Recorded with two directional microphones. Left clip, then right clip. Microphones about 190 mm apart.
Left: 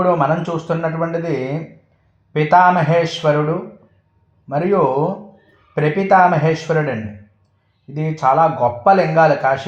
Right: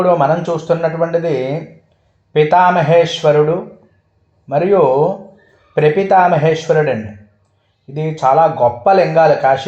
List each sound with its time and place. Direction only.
0.0 s speech: 25° right (ahead or behind)
4.4 s speech: 30° right (ahead or behind)
7.9 s speech: 30° right (ahead or behind)